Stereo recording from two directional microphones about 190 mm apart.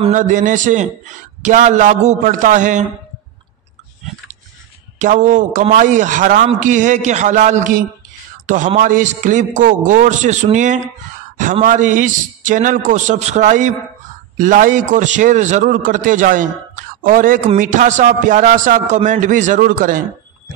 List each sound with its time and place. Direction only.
0.1 s a man's voice: 40° right (ahead or behind)
5.0 s a man's voice: 40° right (ahead or behind)